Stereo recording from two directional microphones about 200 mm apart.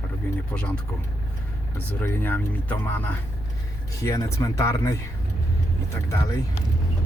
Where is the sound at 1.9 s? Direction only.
10° left (ahead or behind).